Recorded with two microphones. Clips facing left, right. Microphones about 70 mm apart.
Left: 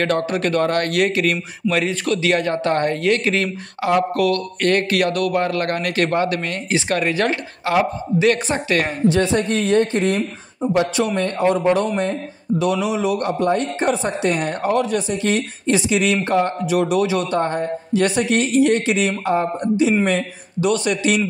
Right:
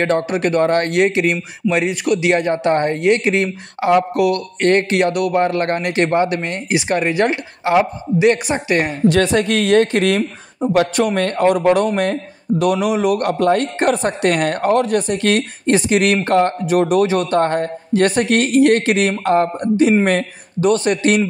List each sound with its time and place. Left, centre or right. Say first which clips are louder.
0.0 s a man's voice: right 2 dB; right
9.0 s speech: right 3 dB; right
11.0 s speech: right 3 dB; right
12.8 s speech: right 4 dB; right
20.7 s speech: right 3 dB; right